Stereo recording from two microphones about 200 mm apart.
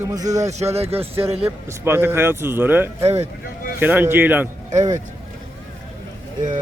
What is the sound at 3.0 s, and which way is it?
Speech, 35° right (ahead or behind).